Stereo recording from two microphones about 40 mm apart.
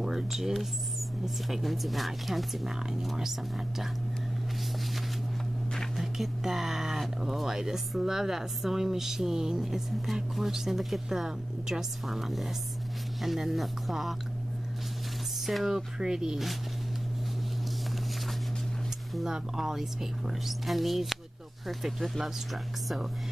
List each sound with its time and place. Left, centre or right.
0.0 s speech: centre
5.9 s speech: centre
15.4 s speech: centre
19.2 s speech: centre